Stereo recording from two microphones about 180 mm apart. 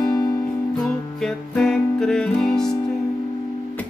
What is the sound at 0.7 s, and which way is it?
Music, centre (ahead or behind).